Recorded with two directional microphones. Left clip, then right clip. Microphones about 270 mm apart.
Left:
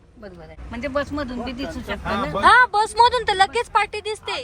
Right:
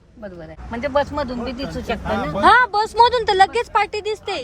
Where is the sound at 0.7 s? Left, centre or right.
Right.